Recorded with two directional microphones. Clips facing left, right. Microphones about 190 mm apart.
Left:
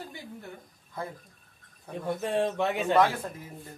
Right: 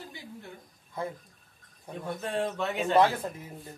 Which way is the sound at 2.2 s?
15° left (ahead or behind).